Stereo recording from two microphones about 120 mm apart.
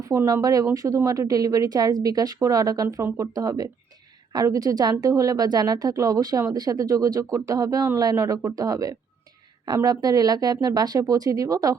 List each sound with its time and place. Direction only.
0.0 s a woman's voice: 30° right (ahead or behind)